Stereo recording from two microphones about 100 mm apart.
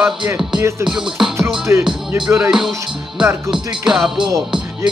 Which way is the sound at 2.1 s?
10° right (ahead or behind).